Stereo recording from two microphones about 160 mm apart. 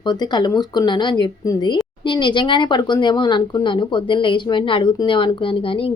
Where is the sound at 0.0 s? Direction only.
25° left (ahead or behind).